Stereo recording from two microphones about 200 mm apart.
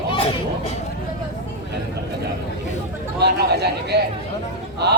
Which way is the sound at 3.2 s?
55° right (ahead or behind).